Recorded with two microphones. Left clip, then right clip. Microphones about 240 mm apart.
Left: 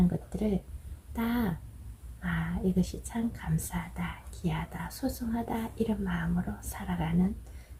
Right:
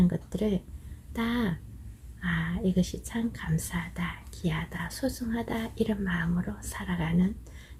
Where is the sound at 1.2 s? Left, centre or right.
Centre.